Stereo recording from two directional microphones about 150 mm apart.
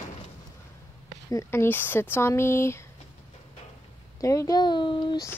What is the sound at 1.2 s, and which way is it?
Speech, 20° left (ahead or behind).